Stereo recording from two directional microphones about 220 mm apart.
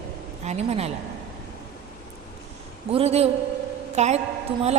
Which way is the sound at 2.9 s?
25° right (ahead or behind).